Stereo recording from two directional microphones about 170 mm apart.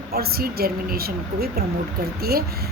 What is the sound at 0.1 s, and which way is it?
A woman's voice, 65° right (ahead or behind).